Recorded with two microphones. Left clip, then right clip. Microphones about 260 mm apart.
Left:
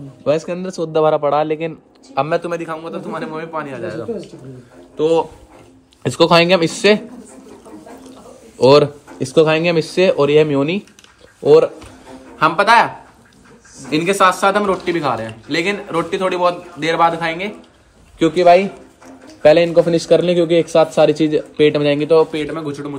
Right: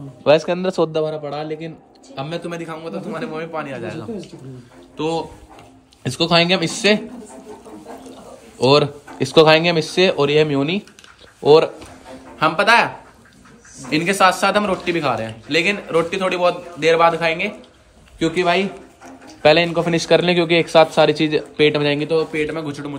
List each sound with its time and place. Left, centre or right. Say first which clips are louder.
0.2 s a man's voice: right 3 dB; centre
2.1 s a man's voice: left 9 dB; centre
2.6 s a man's voice: left 3 dB; centre
8.5 s a man's voice: left 4 dB; centre
22.3 s a man's voice: right 1 dB; centre
22.6 s a man's voice: left 2 dB; centre